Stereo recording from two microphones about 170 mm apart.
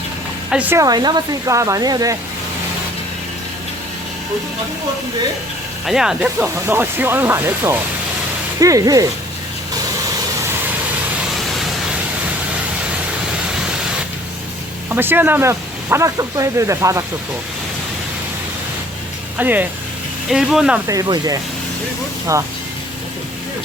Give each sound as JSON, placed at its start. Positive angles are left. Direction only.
{"t": 0.5, "sound": "speech", "side_deg": -10}
{"t": 0.8, "sound": "speech", "side_deg": -25}
{"t": 5.8, "sound": "speech", "side_deg": 0}
{"t": 14.8, "sound": "speech", "side_deg": -10}
{"t": 19.4, "sound": "speech", "side_deg": -10}
{"t": 20.8, "sound": "speech", "side_deg": -20}